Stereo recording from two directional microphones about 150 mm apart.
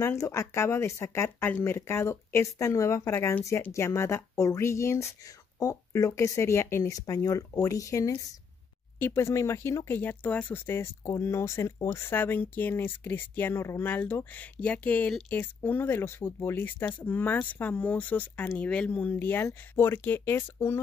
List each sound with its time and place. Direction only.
0.0 s speech: 20° left (ahead or behind)